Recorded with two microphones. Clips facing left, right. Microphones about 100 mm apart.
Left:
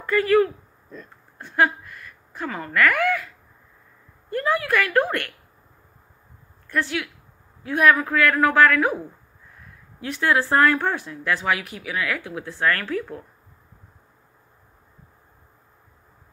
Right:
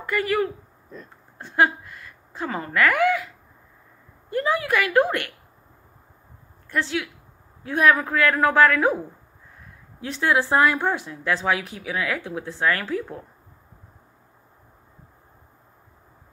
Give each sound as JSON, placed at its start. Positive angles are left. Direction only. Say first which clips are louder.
{"t": 0.0, "sound": "speech", "louder": "left 5 dB", "side_deg": -15}
{"t": 4.3, "sound": "speech", "louder": "even", "side_deg": -20}
{"t": 6.7, "sound": "speech", "louder": "even", "side_deg": -25}
{"t": 9.9, "sound": "speech", "louder": "even", "side_deg": -25}